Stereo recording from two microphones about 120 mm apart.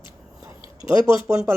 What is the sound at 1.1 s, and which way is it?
Speech, 25° right (ahead or behind).